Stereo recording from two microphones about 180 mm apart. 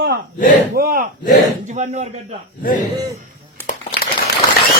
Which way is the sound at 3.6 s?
55° left (ahead or behind).